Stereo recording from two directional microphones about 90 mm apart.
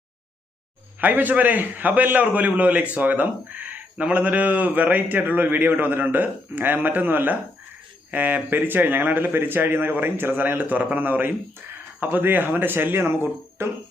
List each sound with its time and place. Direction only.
0.9 s a man's voice: 20° right (ahead or behind)